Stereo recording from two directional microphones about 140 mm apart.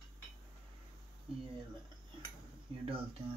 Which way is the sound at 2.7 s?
40° right (ahead or behind).